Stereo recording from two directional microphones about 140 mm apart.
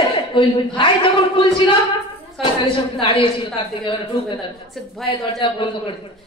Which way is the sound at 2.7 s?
40° left (ahead or behind).